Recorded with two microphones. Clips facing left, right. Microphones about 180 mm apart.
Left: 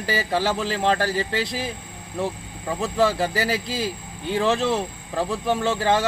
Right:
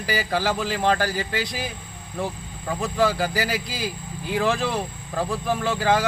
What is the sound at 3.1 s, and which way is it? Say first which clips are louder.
A man's voice: left 1 dB; 25° left (ahead or behind).